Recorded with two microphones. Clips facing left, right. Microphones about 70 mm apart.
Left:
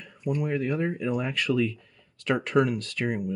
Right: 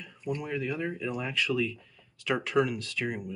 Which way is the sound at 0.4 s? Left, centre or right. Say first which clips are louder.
Left 7 dB; left.